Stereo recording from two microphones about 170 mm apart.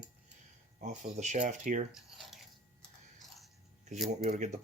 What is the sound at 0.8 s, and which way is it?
Speech, 45° right (ahead or behind).